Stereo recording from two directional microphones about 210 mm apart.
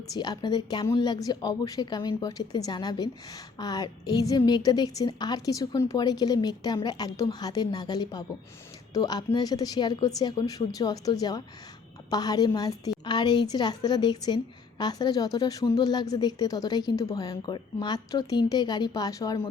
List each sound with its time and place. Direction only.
0.1 s a woman's voice: 20° left (ahead or behind)